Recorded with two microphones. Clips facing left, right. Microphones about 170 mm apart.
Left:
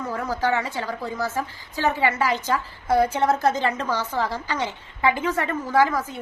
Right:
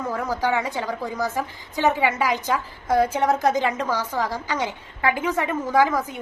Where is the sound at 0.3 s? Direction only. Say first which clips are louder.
Left 1 dB; 15° right (ahead or behind).